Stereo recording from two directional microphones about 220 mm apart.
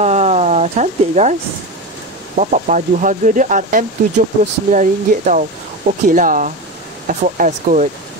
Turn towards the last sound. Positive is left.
turn(degrees=-30)  # may be behind; listen again after turning